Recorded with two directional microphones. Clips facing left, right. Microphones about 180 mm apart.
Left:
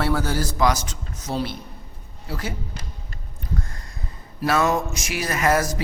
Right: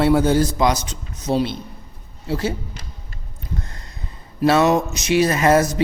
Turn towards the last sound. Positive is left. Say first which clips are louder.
# right 5 dB
turn(degrees=-25)  # may be behind; listen again after turning